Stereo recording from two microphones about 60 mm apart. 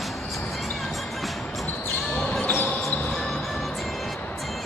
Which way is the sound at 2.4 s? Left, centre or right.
Left.